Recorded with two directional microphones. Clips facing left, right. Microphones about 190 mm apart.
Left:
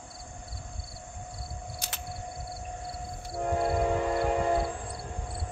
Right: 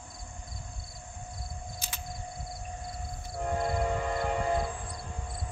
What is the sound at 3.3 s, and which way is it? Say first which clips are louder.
Train: left 3 dB; 35° left (ahead or behind).